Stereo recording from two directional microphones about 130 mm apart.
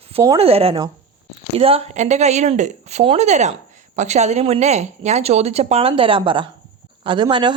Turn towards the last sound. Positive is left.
turn(degrees=-35)  # may be behind; listen again after turning